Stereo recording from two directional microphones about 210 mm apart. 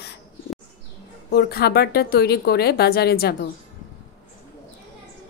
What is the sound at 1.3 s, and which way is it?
A woman's voice, 50° left (ahead or behind).